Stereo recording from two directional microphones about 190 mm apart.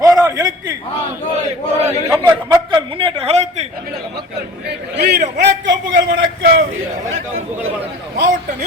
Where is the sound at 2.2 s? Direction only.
20° right (ahead or behind).